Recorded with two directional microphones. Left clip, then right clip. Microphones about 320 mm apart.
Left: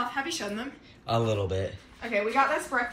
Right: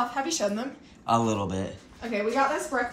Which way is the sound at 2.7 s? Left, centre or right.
Centre.